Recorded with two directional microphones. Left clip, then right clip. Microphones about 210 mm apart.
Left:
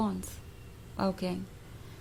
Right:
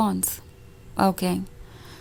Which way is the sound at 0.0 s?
40° right (ahead or behind).